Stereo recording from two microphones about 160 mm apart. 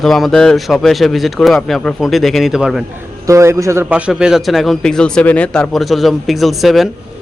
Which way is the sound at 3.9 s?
5° right (ahead or behind).